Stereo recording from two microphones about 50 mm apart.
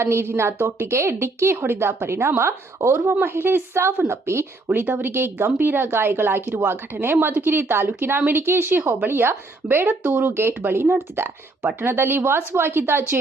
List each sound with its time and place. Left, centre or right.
0.0 s a woman's voice: right
4.9 s speech: right